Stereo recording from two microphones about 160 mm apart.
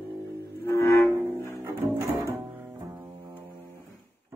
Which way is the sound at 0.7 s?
15° left (ahead or behind).